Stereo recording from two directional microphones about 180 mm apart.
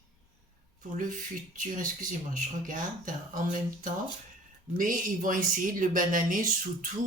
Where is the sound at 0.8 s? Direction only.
45° right (ahead or behind).